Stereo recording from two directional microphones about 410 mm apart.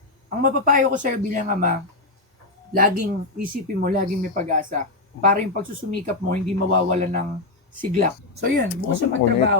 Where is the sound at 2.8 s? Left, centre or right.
Right.